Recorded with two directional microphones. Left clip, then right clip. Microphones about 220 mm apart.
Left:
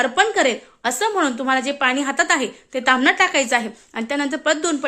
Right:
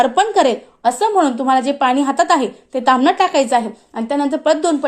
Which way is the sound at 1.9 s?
Centre (ahead or behind).